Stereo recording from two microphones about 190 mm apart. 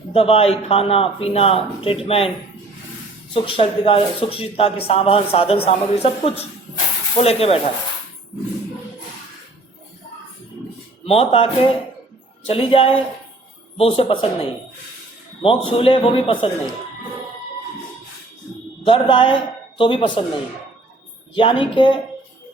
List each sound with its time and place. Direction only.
0.1 s a man's voice: 30° left (ahead or behind)
3.3 s a man's voice: 30° left (ahead or behind)
11.0 s a man's voice: 30° left (ahead or behind)
15.4 s a man's voice: 30° left (ahead or behind)
18.9 s a man's voice: 25° left (ahead or behind)
21.3 s a man's voice: 25° left (ahead or behind)